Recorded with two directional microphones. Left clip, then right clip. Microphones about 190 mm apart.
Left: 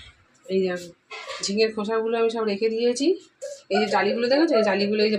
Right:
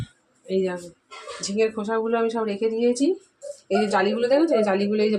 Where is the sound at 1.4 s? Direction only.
35° right (ahead or behind).